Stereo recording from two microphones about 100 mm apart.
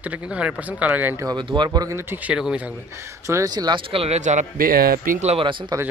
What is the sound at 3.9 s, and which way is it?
Speech, 80° right.